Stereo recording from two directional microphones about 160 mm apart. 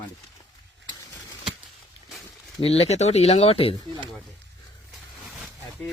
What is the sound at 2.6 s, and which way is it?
Speech, 40° left (ahead or behind).